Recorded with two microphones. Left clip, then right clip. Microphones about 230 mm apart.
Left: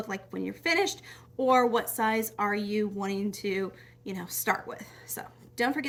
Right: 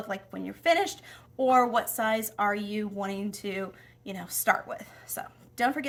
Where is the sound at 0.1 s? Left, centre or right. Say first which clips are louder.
Even; centre.